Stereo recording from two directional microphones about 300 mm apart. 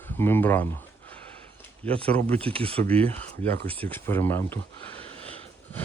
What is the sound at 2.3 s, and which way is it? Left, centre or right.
Speech, centre.